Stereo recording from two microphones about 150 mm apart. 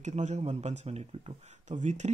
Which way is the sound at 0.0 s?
50° right (ahead or behind).